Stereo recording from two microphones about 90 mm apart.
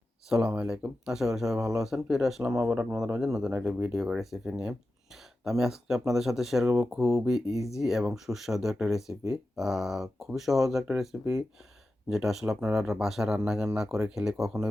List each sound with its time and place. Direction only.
0.3 s speech: 5° right (ahead or behind)
1.5 s speech: 35° right (ahead or behind)
1.8 s speech: 5° right (ahead or behind)
2.6 s speech: 20° right (ahead or behind)
3.8 s speech: 10° right (ahead or behind)